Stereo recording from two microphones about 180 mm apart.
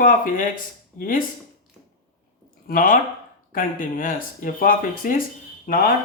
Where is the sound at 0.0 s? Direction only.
50° left (ahead or behind).